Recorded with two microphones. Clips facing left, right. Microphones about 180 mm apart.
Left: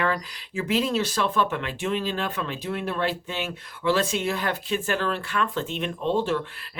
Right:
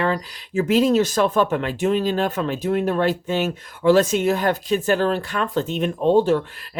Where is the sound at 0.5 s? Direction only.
45° right (ahead or behind).